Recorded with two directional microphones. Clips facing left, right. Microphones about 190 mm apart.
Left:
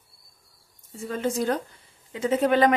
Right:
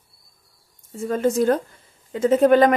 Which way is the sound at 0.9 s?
45° right (ahead or behind).